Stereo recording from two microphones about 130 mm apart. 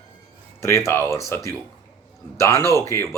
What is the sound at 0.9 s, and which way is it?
Speech, 20° left (ahead or behind).